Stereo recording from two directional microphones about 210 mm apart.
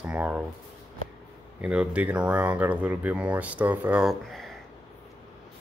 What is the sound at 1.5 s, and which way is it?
Speech, 5° right (ahead or behind).